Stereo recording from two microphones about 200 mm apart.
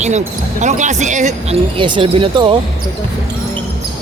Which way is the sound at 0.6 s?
35° right (ahead or behind).